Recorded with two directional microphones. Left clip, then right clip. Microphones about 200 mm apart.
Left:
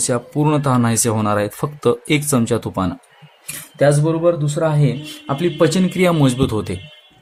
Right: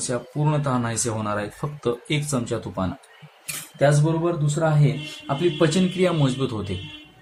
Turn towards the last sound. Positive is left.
turn(degrees=50)  # may be behind; listen again after turning